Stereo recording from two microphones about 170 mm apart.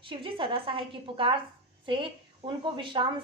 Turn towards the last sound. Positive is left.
turn(degrees=-30)  # may be behind; listen again after turning